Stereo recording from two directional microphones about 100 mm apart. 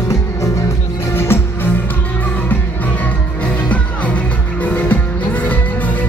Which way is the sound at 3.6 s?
15° left (ahead or behind).